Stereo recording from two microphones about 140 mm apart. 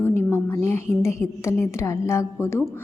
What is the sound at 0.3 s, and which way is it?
A woman's voice, 20° left (ahead or behind).